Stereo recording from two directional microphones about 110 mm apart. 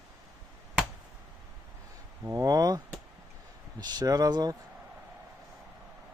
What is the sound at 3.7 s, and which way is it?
Speech, 35° right (ahead or behind).